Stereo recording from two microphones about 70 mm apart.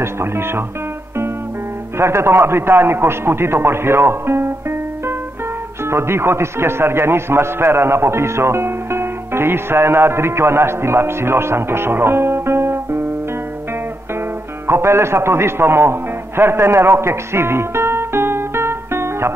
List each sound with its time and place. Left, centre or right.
0.0 s a man's voice: right
2.0 s a man's voice: right
14.7 s a man's voice: right